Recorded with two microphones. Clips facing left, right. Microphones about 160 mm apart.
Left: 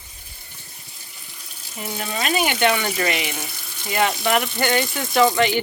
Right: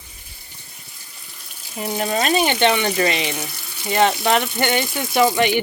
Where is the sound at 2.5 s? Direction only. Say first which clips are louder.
Right 2 dB; 25° right (ahead or behind).